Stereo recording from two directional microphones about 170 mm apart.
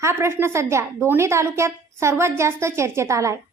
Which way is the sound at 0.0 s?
15° right (ahead or behind).